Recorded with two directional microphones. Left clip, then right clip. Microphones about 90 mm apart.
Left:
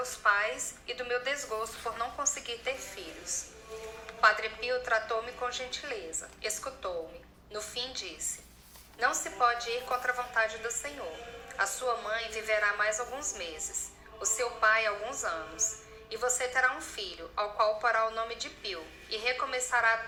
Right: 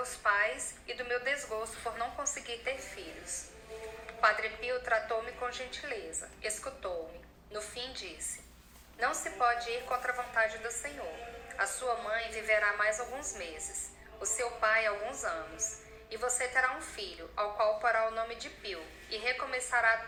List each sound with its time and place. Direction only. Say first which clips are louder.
0.0 s a woman's voice: left 2 dB; 25° left (ahead or behind)